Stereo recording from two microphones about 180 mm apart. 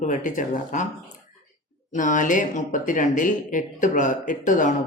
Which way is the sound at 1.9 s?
45° left (ahead or behind).